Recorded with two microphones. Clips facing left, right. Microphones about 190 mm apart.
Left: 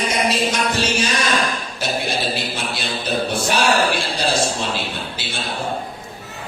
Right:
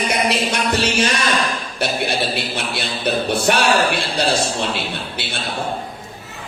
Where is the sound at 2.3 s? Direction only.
60° right (ahead or behind).